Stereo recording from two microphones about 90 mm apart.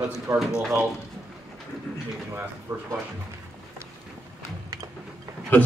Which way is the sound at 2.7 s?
25° right (ahead or behind).